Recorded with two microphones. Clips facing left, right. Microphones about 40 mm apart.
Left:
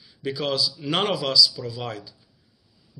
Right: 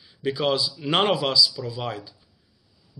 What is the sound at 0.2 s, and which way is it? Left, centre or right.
Speech, centre.